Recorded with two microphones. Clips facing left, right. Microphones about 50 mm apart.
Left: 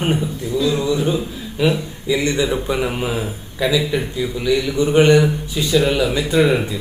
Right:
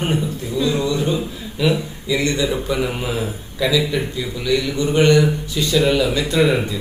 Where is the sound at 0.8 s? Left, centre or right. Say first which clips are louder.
Left 1 dB; centre.